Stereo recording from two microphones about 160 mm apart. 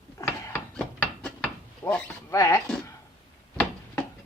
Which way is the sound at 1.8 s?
15° left (ahead or behind).